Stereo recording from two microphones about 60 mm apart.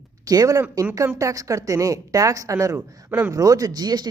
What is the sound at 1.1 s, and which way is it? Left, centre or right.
A woman's voice, right.